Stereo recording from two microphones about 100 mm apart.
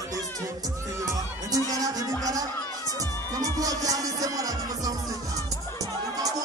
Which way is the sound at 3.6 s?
35° right (ahead or behind).